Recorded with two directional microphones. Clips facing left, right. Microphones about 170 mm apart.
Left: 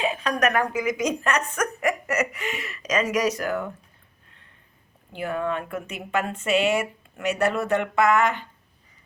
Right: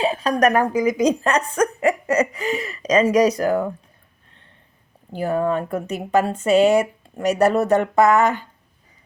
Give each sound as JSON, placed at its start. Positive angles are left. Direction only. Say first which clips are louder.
{"t": 0.0, "sound": "speech", "louder": "right 5 dB", "side_deg": -35}
{"t": 5.1, "sound": "speech", "louder": "right 6 dB", "side_deg": -40}